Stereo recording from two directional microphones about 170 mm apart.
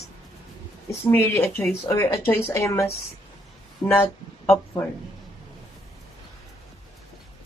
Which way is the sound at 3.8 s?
10° left (ahead or behind).